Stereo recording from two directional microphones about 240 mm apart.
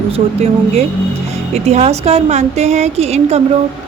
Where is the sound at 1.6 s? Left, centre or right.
Right.